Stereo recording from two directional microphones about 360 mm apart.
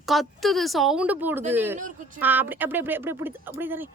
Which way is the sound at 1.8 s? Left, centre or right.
Right.